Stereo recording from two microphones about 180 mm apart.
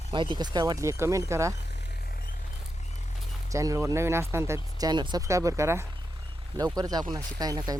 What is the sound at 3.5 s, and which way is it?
Speech, 15° right (ahead or behind).